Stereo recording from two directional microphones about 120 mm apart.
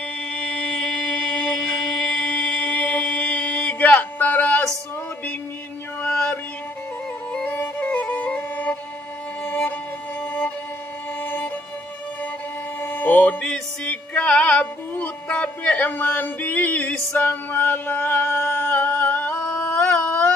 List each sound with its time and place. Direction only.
0.3 s music: 10° left (ahead or behind)
6.0 s music: 10° left (ahead or behind)
7.4 s music: 15° left (ahead or behind)
11.2 s music: 15° left (ahead or behind)
12.8 s music: 15° left (ahead or behind)